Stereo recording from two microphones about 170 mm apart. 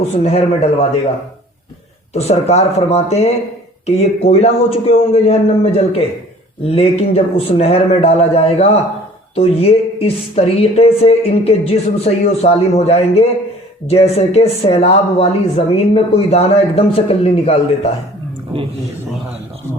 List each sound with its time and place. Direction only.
0.3 s speech: 35° left (ahead or behind)
2.1 s speech: 40° left (ahead or behind)